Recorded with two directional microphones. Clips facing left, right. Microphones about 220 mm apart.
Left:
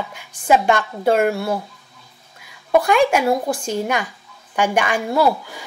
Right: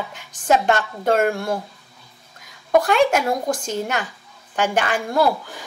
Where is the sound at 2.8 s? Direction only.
10° left (ahead or behind).